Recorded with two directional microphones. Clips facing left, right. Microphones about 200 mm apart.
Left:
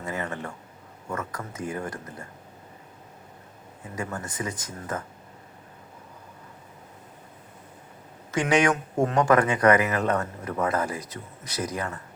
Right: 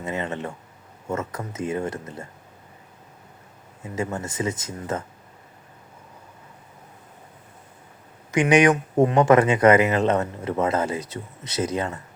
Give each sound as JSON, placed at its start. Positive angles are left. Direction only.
{"t": 0.0, "sound": "a sound", "side_deg": -20}
{"t": 1.0, "sound": "speech", "side_deg": -25}
{"t": 3.9, "sound": "speech", "side_deg": -25}
{"t": 8.3, "sound": "speech", "side_deg": -15}